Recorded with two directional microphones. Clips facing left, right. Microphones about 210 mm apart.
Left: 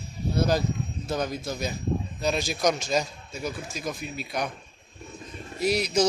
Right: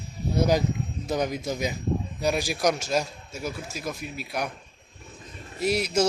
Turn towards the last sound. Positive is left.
turn(degrees=-5)  # may be behind; listen again after turning